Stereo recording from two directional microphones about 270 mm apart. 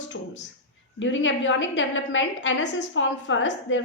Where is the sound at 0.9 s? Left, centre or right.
Left.